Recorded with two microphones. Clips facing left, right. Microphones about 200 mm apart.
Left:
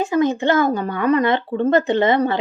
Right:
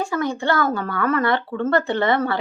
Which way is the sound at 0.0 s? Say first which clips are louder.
Left 5 dB; 20° left (ahead or behind).